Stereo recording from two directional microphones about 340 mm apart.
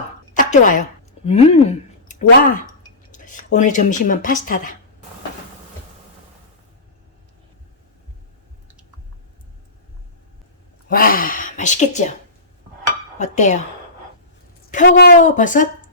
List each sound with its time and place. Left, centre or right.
0.3 s a sound: left
1.2 s speech: centre
10.8 s speech: left
13.1 s speech: left
14.7 s speech: left